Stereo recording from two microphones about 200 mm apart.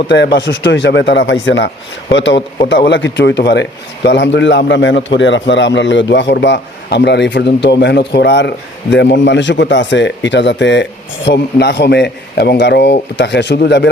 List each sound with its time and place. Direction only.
0.1 s a man's voice: 60° left (ahead or behind)